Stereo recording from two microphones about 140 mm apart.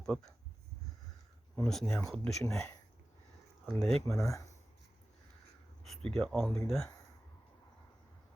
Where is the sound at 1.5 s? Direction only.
5° left (ahead or behind).